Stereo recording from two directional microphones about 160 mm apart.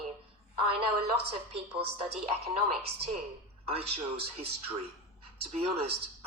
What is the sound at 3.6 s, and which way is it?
A man's voice, 40° right (ahead or behind).